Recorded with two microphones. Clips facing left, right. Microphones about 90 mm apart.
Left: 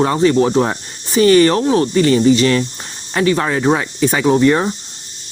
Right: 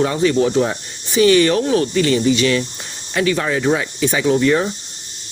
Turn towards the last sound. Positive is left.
turn(degrees=30)  # may be behind; listen again after turning